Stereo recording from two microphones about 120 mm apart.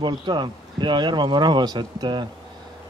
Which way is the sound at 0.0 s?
40° right (ahead or behind).